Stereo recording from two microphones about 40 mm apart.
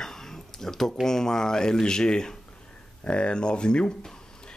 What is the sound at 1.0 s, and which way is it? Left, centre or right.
Speech, centre.